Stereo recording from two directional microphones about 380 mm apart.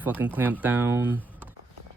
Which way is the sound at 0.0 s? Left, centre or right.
Centre.